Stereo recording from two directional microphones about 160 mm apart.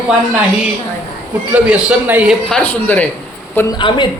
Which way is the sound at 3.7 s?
30° left (ahead or behind).